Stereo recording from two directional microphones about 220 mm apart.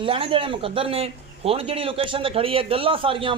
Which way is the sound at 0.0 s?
25° right (ahead or behind).